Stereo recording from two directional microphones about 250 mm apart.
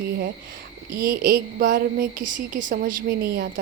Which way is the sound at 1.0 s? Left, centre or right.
Right.